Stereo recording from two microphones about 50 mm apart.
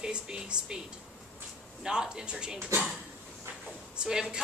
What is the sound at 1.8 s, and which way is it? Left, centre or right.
Speech, centre.